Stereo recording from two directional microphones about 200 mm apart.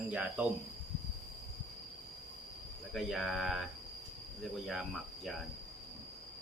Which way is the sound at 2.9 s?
Centre (ahead or behind).